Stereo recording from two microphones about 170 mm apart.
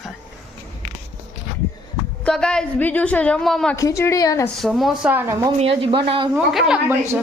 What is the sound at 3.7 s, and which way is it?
Speech, 20° left (ahead or behind).